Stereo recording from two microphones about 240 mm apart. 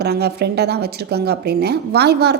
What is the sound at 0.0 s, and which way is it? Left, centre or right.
Speech, right.